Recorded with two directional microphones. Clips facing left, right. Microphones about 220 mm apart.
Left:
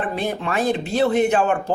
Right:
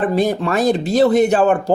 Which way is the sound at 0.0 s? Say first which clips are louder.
Right 7 dB; 40° right (ahead or behind).